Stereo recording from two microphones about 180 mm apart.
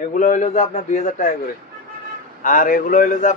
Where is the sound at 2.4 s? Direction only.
50° left (ahead or behind).